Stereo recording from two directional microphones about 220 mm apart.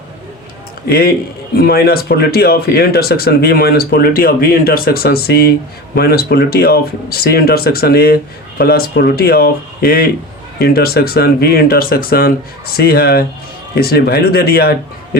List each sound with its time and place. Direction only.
0.9 s speech: 45° left (ahead or behind)